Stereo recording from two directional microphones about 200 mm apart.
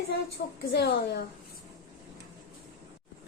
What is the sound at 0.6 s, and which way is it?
Speech, 55° left (ahead or behind).